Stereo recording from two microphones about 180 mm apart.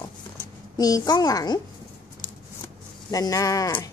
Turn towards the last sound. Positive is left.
turn(degrees=15)  # may be behind; listen again after turning